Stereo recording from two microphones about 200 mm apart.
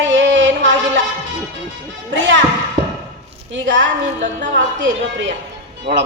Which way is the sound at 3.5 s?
65° right (ahead or behind).